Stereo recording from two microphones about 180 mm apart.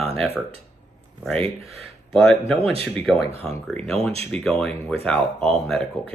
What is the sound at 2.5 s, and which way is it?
Speech, 35° right (ahead or behind).